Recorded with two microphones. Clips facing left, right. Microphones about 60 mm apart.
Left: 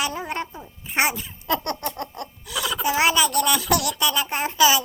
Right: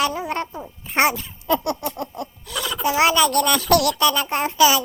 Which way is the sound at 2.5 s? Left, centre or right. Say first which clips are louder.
Left 1 dB; centre.